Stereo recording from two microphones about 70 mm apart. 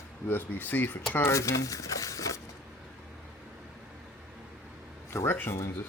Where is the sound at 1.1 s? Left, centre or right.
Left.